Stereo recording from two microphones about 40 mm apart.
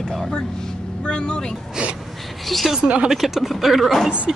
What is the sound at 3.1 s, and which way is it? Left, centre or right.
Speech, centre.